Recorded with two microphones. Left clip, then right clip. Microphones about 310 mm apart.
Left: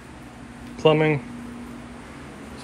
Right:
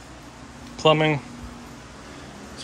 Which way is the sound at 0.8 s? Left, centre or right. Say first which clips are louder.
Even; centre.